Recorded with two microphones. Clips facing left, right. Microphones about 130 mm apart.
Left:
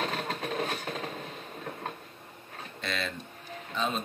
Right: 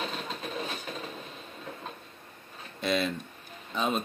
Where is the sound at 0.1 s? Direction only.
65° left (ahead or behind).